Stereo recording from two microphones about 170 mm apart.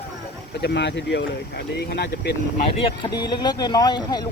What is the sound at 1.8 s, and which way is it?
Speech, 70° left (ahead or behind).